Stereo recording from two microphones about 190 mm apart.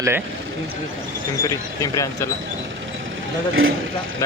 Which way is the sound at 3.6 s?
90° right.